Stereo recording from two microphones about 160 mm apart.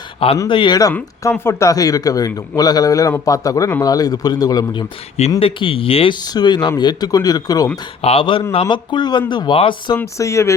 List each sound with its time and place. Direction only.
0.4 s speech: 30° left (ahead or behind)
6.2 s speech: 25° left (ahead or behind)
8.0 s speech: 35° left (ahead or behind)
10.0 s speech: 20° left (ahead or behind)